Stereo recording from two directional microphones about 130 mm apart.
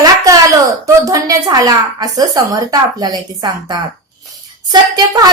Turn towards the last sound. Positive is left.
turn(degrees=-30)  # may be behind; listen again after turning